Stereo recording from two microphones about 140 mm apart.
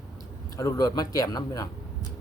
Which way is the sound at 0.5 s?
25° left (ahead or behind).